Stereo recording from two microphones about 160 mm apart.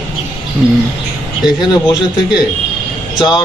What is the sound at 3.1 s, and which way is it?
Speech, 25° left (ahead or behind).